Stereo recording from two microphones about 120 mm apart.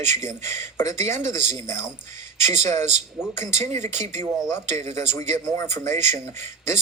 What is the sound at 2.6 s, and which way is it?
Speech, 20° left (ahead or behind).